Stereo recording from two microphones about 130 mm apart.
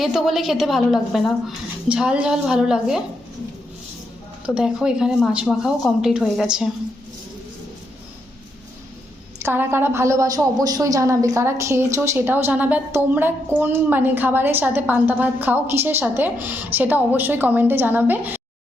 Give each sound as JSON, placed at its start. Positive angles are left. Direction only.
{"t": 0.0, "sound": "speech", "side_deg": 0}
{"t": 4.4, "sound": "speech", "side_deg": -5}
{"t": 9.4, "sound": "a woman's voice", "side_deg": -15}